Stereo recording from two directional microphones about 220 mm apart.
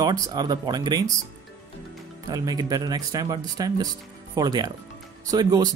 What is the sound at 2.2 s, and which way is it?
Speech, 15° right (ahead or behind).